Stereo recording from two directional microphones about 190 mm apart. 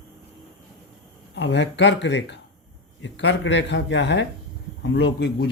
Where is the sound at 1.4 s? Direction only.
65° left (ahead or behind).